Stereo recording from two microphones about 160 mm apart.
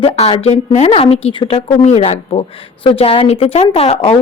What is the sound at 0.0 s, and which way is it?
A woman's voice, 35° left (ahead or behind).